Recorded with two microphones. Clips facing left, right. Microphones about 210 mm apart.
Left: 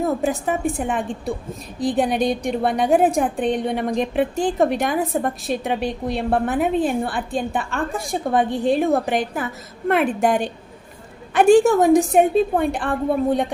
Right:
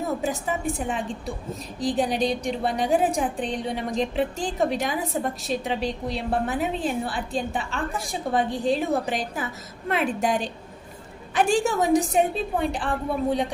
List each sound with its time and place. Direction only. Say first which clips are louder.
0.2 s a woman's voice: left 6 dB; 55° left (ahead or behind)